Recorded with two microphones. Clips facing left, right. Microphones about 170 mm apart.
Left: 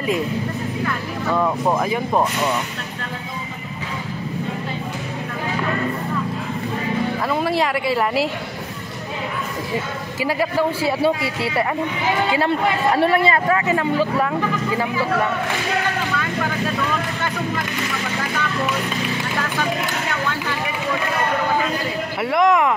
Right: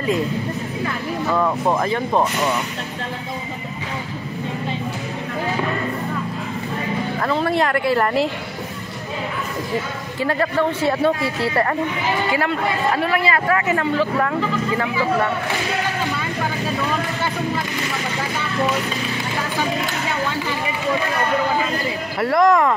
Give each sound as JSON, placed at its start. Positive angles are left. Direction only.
{"t": 1.3, "sound": "speech", "side_deg": 5}
{"t": 7.2, "sound": "speech", "side_deg": 5}
{"t": 10.2, "sound": "a woman's voice", "side_deg": 10}
{"t": 12.9, "sound": "speech", "side_deg": 30}
{"t": 22.2, "sound": "speech", "side_deg": 5}